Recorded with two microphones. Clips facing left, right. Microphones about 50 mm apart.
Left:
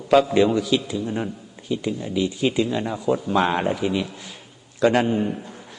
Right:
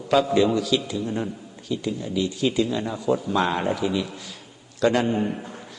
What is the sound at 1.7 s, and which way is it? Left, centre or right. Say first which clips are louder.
A man's voice: left 2 dB; left.